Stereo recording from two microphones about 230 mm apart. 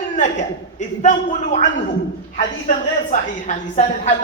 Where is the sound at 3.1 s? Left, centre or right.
Left.